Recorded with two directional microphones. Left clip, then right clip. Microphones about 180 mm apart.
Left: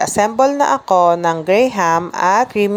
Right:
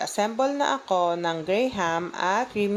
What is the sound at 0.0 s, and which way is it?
Speech, 35° left (ahead or behind).